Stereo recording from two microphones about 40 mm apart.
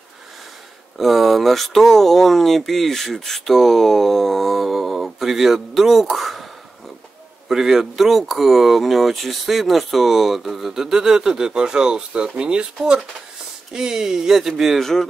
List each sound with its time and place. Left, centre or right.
0.9 s speech: centre
7.4 s speech: centre
13.7 s speech: centre
14.8 s speech: centre